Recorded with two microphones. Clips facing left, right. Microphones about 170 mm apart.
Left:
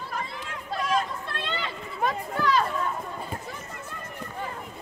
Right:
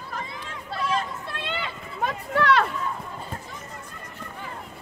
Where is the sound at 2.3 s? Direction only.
70° right (ahead or behind).